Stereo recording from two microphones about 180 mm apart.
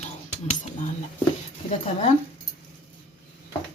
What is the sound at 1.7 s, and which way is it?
Speech, 45° left (ahead or behind).